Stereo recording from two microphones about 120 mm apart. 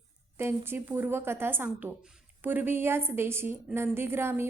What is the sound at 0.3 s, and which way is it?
A woman's voice, 20° right (ahead or behind).